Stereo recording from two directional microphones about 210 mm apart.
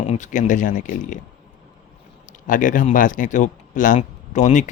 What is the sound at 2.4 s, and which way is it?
Speech, 40° left (ahead or behind).